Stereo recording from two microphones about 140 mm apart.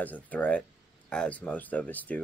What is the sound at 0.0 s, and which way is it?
Speech, 10° left (ahead or behind).